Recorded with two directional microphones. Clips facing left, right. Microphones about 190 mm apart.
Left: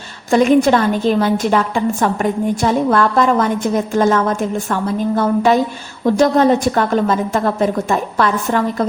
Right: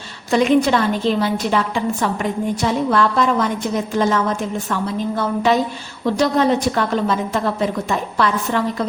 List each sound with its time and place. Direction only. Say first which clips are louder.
0.3 s a woman's voice: left 3 dB; 50° left (ahead or behind)